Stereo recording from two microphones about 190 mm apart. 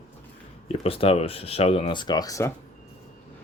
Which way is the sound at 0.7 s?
30° left (ahead or behind).